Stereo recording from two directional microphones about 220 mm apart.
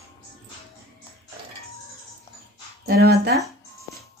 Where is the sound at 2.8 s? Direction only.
45° right (ahead or behind).